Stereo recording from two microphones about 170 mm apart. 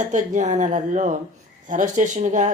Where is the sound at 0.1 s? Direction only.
45° right (ahead or behind).